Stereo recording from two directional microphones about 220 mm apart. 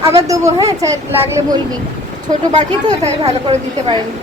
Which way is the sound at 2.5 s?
30° right (ahead or behind).